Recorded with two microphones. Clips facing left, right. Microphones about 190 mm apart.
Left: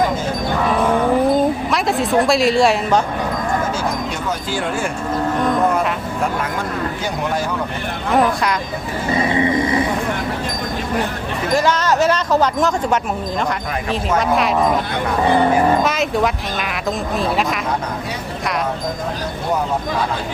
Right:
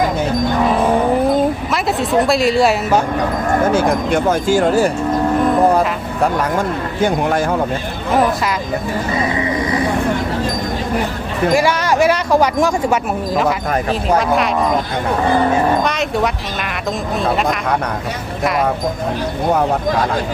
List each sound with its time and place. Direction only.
1.7 s a woman's voice: centre (ahead or behind)
3.7 s speech: 60° right (ahead or behind); by 4.9 s 40° right (ahead or behind)
7.0 s speech: 55° right (ahead or behind)
8.1 s speech: centre (ahead or behind)
9.3 s speech: 25° left (ahead or behind)
11.5 s speech: 10° right (ahead or behind)
14.2 s speech: centre (ahead or behind)
15.8 s speech: centre (ahead or behind)
17.3 s speech: centre (ahead or behind)